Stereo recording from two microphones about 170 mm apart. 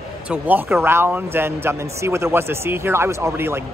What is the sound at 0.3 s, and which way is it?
A man's voice, 10° right (ahead or behind).